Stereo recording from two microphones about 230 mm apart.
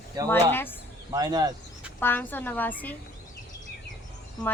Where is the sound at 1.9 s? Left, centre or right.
Centre.